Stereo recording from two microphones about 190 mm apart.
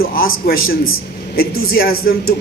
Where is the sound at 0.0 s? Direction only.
50° left (ahead or behind).